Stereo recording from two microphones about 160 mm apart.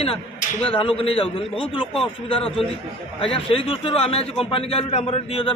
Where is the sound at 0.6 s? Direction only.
35° left (ahead or behind).